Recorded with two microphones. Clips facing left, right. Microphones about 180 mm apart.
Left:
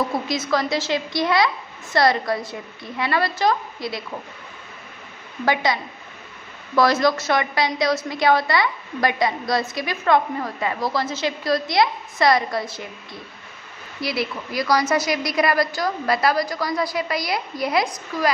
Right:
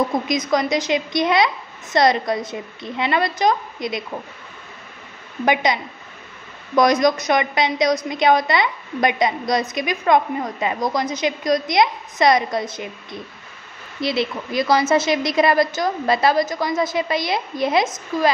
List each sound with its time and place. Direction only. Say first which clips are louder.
0.0 s a woman's voice: right 3 dB; 15° right (ahead or behind)
5.4 s a woman's voice: right 2 dB; 20° right (ahead or behind)